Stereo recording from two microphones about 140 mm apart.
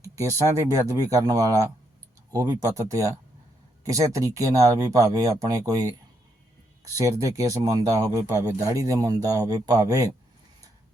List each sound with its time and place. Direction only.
0.0 s speech: 25° right (ahead or behind)
6.9 s speech: 25° right (ahead or behind)